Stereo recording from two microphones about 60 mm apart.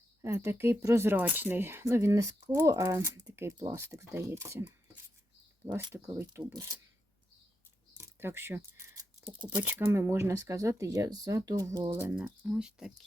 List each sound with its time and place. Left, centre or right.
0.2 s speech: right
1.9 s speech: right
3.3 s speech: right
5.7 s speech: right
7.9 s speech: right
11.9 s speech: right
12.5 s speech: centre